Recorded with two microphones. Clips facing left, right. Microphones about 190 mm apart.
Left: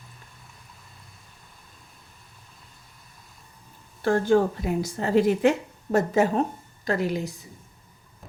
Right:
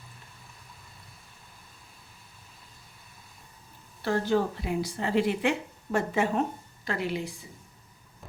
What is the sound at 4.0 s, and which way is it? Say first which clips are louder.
A woman's voice: left 5 dB; 50° left (ahead or behind).